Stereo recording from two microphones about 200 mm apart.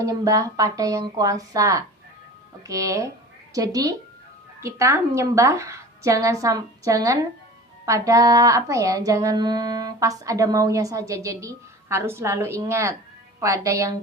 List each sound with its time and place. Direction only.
0.0 s speech: 15° right (ahead or behind)